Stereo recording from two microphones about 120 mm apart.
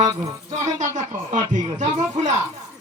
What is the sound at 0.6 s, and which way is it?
Speech, 80° right.